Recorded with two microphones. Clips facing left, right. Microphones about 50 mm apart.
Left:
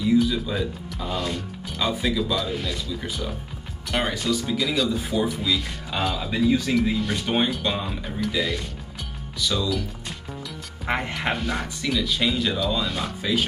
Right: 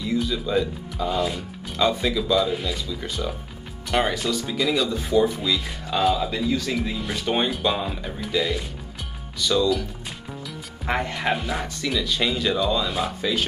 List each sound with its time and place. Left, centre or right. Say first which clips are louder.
0.1 s speech: left 1 dB; centre
6.3 s speech: left 3 dB; centre
7.2 s speech: even; centre
10.9 s speech: right 1 dB; centre
11.3 s speech: even; centre